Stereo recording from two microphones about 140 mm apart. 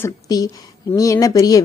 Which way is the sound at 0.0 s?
25° left (ahead or behind).